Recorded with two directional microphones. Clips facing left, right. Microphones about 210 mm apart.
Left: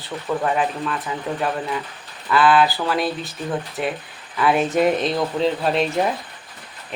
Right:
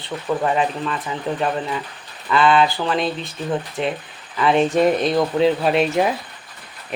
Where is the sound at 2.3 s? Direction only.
5° left (ahead or behind).